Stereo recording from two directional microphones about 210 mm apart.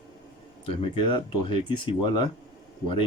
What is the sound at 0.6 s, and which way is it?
Speech, 25° left (ahead or behind).